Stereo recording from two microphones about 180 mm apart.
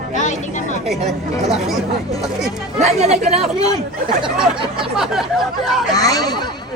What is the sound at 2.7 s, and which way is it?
Speech, 35° right (ahead or behind).